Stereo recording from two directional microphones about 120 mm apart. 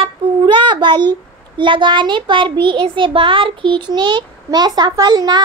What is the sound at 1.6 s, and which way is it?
A child's voice, 40° right (ahead or behind).